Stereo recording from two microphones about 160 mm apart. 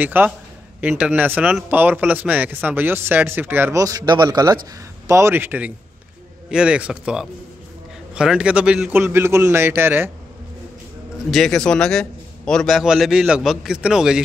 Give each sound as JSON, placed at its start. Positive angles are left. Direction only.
{"t": 0.0, "sound": "a man's voice", "side_deg": -10}
{"t": 11.2, "sound": "a man's voice", "side_deg": 0}